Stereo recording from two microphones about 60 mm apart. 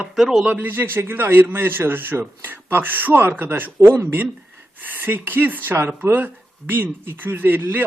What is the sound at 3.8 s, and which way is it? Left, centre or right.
Speech, right.